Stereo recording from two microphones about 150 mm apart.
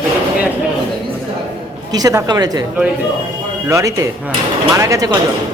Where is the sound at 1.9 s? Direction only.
25° right (ahead or behind).